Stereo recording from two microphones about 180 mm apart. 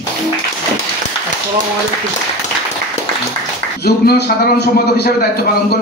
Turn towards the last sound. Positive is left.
turn(degrees=60)  # may be behind; listen again after turning